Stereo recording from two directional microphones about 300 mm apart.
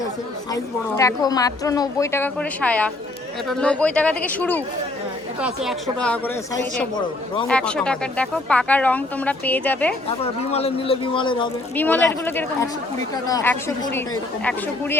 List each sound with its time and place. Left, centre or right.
0.5 s speech: centre
10.1 s speech: centre